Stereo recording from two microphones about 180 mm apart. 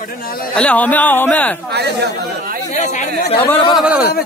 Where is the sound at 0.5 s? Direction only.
5° left (ahead or behind).